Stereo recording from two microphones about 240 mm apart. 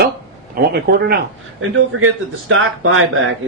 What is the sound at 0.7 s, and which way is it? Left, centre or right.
Speech, right.